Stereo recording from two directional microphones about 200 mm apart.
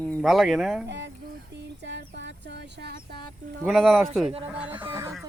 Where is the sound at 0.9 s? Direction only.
60° right (ahead or behind).